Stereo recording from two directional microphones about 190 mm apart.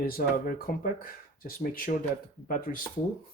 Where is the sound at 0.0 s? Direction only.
50° left (ahead or behind).